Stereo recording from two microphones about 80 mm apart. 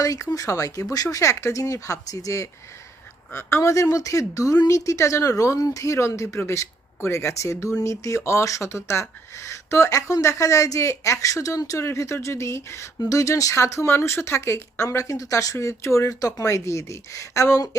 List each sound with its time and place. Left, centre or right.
0.0 s speech: left
4.9 s speech: left